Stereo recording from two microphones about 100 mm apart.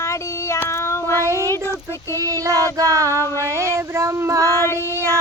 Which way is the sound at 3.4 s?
30° right (ahead or behind).